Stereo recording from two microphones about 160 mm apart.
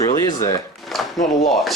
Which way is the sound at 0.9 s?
Centre (ahead or behind).